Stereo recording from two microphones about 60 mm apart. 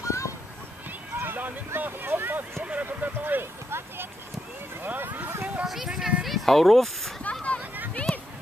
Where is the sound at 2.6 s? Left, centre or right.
Right.